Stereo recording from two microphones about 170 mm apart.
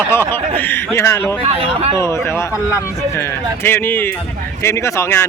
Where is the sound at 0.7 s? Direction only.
15° left (ahead or behind).